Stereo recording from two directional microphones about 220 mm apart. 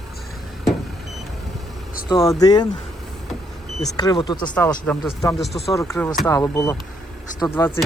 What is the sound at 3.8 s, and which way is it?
Speech, 15° left (ahead or behind).